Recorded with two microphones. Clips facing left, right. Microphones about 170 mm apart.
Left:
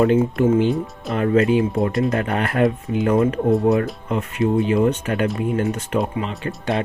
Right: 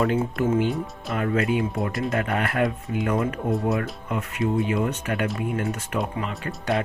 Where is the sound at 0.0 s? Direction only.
25° left (ahead or behind).